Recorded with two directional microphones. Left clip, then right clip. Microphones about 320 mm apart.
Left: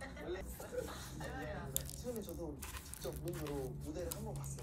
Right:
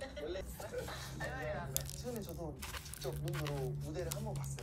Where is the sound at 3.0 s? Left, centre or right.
Centre.